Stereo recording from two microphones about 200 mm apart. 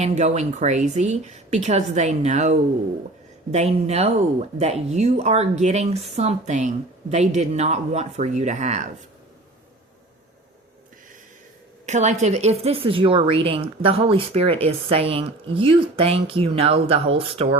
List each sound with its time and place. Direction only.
0.0 s speech: 35° right (ahead or behind)
11.9 s a woman's voice: 35° right (ahead or behind)